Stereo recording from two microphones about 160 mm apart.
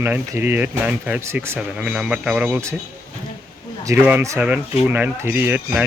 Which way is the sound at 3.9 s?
10° right (ahead or behind).